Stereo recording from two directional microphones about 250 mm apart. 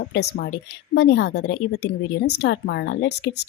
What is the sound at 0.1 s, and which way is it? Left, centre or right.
A woman's voice, left.